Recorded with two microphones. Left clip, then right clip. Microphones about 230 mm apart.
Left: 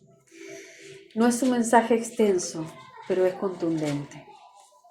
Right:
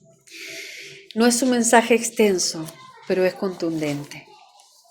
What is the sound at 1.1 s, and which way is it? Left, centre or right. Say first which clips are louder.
A woman's voice: right 5 dB; right.